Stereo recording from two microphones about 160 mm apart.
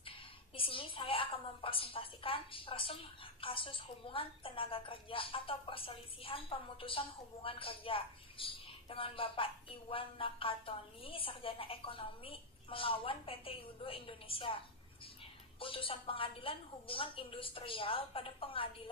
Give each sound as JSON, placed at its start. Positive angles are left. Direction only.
{"t": 0.5, "sound": "a woman's voice", "side_deg": 35}